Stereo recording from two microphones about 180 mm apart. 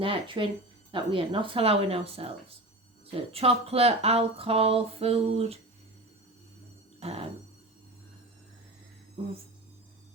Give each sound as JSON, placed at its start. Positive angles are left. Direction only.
{"t": 0.0, "sound": "speech", "side_deg": -30}
{"t": 7.0, "sound": "music", "side_deg": -35}